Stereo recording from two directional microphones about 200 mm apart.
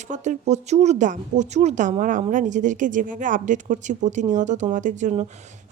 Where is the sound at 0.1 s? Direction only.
35° right (ahead or behind).